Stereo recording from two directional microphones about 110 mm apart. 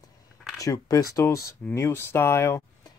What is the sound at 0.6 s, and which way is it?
Speech, 30° left (ahead or behind).